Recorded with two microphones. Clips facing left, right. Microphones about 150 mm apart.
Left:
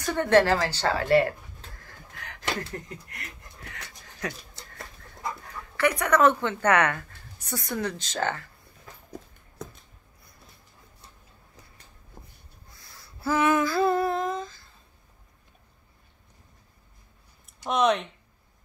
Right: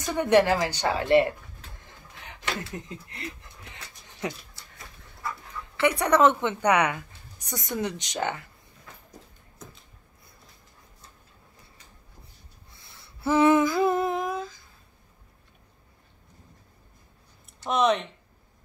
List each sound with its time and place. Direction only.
0.0 s speech: 15° right (ahead or behind)
1.9 s a sound: 20° right (ahead or behind)
5.8 s a woman's voice: 25° right (ahead or behind)
12.7 s humming: 25° right (ahead or behind); by 14.6 s 10° right (ahead or behind)
17.6 s speech: centre (ahead or behind)